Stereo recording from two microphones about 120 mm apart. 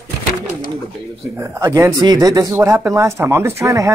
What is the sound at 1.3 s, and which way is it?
Speech, 25° right (ahead or behind).